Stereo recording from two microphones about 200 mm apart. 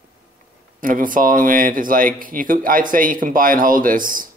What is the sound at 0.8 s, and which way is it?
Speech, 45° right (ahead or behind).